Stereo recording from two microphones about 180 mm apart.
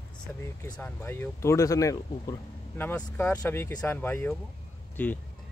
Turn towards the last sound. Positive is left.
turn(degrees=10)  # may be behind; listen again after turning